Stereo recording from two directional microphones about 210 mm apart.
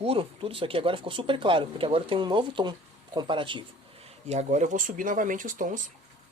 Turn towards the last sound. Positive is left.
turn(degrees=-40)  # may be behind; listen again after turning